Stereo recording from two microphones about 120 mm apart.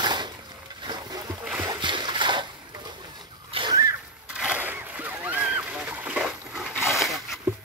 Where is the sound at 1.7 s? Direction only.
40° right (ahead or behind).